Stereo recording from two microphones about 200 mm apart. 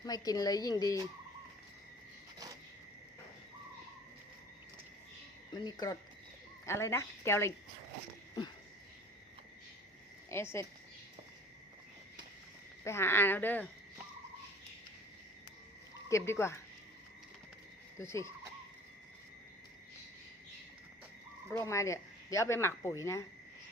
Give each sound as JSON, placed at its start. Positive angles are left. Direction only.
{"t": 0.0, "sound": "a woman's voice", "side_deg": 20}
{"t": 5.6, "sound": "a woman's voice", "side_deg": 20}
{"t": 10.2, "sound": "speech", "side_deg": 10}
{"t": 12.8, "sound": "speech", "side_deg": 10}
{"t": 16.0, "sound": "speech", "side_deg": 15}
{"t": 18.0, "sound": "speech", "side_deg": 15}
{"t": 21.5, "sound": "speech", "side_deg": 15}